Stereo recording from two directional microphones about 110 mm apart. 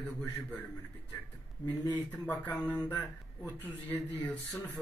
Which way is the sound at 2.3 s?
15° left (ahead or behind).